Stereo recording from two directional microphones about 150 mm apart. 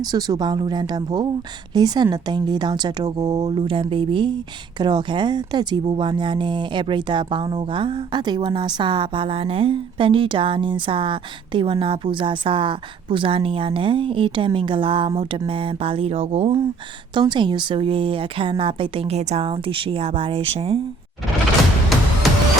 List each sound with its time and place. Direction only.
0.0 s a woman's voice: 25° right (ahead or behind)
3.6 s speech: 35° right (ahead or behind)
17.2 s speech: 30° right (ahead or behind)
21.9 s music: centre (ahead or behind)